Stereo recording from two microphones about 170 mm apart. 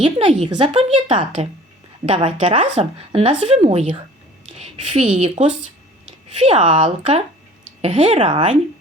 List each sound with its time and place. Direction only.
0.0 s a woman's voice: 30° right (ahead or behind); by 5.2 s 45° right (ahead or behind)
5.2 s a woman's voice: 30° right (ahead or behind)
6.1 s a sound: 40° right (ahead or behind)
6.7 s a woman's voice: 35° right (ahead or behind)